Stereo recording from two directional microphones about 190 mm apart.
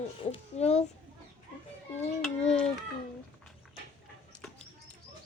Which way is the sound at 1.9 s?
5° left (ahead or behind).